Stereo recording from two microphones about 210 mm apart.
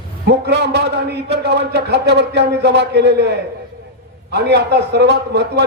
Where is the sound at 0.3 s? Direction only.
50° right (ahead or behind).